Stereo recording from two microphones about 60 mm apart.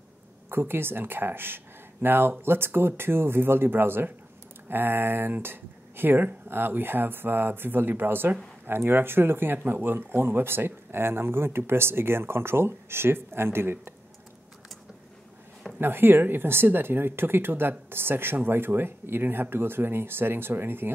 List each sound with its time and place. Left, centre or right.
0.5 s speech: right
15.8 s speech: right